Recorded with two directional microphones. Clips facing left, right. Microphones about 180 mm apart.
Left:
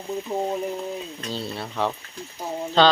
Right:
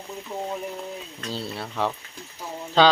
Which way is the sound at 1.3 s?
10° right (ahead or behind).